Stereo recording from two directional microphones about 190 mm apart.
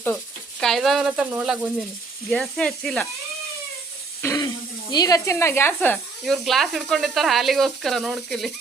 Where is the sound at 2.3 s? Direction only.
5° left (ahead or behind).